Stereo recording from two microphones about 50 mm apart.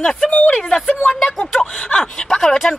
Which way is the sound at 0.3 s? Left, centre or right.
Left.